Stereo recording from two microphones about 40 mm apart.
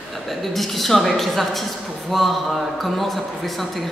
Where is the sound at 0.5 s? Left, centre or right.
Centre.